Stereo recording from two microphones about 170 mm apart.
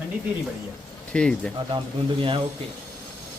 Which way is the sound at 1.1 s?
5° left (ahead or behind).